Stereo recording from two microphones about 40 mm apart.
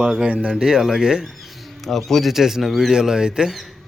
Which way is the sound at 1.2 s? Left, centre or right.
Centre.